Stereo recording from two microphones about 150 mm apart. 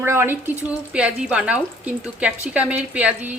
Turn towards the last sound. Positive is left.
turn(degrees=-10)  # may be behind; listen again after turning